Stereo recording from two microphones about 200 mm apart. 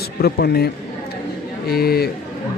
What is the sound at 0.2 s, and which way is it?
A man's voice, 55° left (ahead or behind).